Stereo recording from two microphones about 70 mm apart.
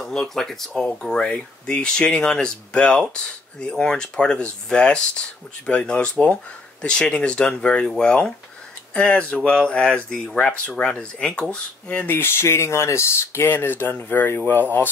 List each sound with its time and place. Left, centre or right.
0.0 s speech: centre
12.2 s speech: left
13.5 s speech: left